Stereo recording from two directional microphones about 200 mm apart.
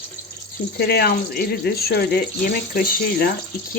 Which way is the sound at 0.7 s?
55° left (ahead or behind).